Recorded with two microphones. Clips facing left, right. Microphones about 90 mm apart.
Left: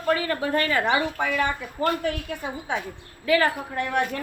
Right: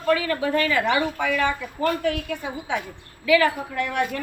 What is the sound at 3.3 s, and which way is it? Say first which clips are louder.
Speech: right 2 dB; 40° left (ahead or behind).